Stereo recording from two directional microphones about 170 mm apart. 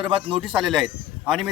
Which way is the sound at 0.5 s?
5° right (ahead or behind).